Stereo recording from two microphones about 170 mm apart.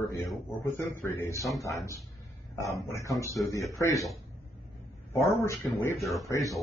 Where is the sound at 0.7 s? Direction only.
15° left (ahead or behind).